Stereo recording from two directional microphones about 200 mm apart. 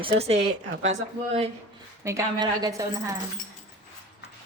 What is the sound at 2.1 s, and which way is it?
Speech, 15° right (ahead or behind).